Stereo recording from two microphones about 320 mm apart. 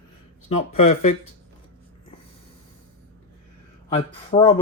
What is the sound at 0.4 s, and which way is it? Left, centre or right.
Speech, centre.